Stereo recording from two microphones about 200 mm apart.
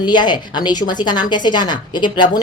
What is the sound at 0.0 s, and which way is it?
Speech, 20° left (ahead or behind).